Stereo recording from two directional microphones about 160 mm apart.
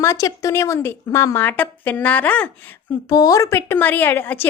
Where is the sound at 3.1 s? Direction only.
20° left (ahead or behind).